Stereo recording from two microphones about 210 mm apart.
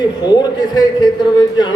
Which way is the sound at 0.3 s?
20° left (ahead or behind).